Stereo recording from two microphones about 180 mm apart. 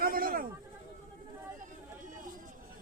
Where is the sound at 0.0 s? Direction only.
55° right (ahead or behind).